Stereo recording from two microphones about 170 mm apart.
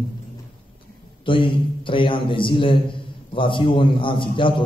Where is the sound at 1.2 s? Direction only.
30° left (ahead or behind).